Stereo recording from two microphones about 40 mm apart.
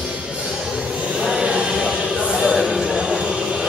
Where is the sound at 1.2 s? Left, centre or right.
Centre.